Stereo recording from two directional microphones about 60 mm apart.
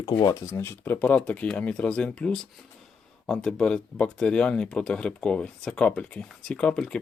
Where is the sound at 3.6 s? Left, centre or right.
Centre.